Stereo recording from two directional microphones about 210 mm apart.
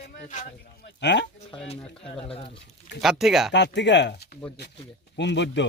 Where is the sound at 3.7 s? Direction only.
55° left (ahead or behind).